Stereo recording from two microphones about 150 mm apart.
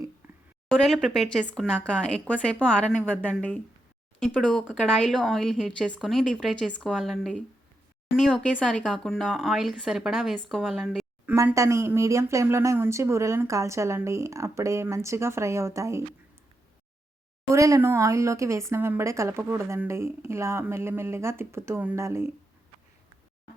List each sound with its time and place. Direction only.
0.2 s a sound: 15° right (ahead or behind)
0.7 s a woman's voice: 5° left (ahead or behind)
11.3 s speech: 15° right (ahead or behind)
17.5 s speech: 20° right (ahead or behind)